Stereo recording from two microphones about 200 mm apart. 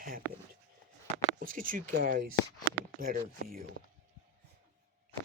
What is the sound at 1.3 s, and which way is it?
Speech, 45° right (ahead or behind).